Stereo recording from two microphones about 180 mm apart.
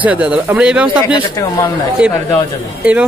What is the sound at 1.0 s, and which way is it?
Speech, 30° left (ahead or behind).